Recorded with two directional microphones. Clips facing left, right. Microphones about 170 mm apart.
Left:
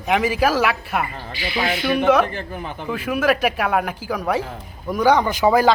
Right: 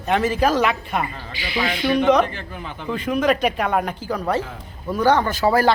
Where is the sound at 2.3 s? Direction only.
45° left (ahead or behind).